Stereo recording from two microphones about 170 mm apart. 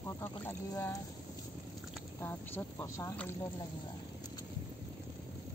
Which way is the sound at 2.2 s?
15° left (ahead or behind).